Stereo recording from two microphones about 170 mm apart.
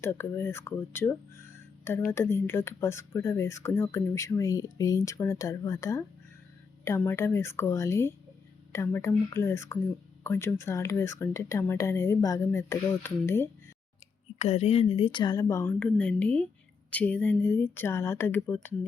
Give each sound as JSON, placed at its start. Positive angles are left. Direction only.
{"t": 0.0, "sound": "a woman's voice", "side_deg": 15}
{"t": 14.3, "sound": "a woman's voice", "side_deg": 40}